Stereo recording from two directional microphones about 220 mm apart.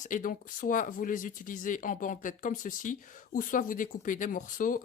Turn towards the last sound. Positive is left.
turn(degrees=35)  # may be behind; listen again after turning